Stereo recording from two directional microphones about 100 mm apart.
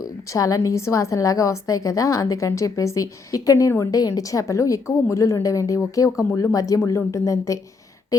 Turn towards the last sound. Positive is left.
turn(degrees=35)  # may be behind; listen again after turning